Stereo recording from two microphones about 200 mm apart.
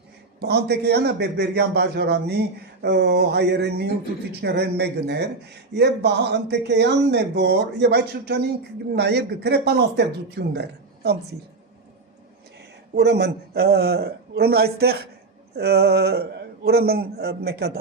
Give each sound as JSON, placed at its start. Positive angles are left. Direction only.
{"t": 0.4, "sound": "speech", "side_deg": -55}
{"t": 12.9, "sound": "a man's voice", "side_deg": -55}